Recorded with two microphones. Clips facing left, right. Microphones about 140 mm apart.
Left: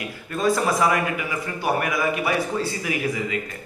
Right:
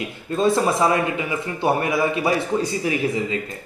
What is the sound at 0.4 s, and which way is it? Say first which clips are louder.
Speech: right 2 dB; 25° right (ahead or behind).